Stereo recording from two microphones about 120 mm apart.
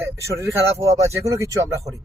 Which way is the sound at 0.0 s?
25° right (ahead or behind).